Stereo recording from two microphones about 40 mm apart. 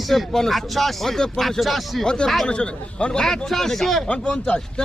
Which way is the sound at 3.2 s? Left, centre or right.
Centre.